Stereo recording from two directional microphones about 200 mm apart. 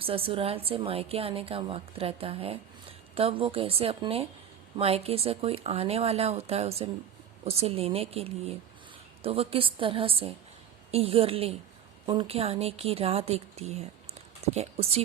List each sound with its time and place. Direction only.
0.0 s a woman's voice: 25° right (ahead or behind)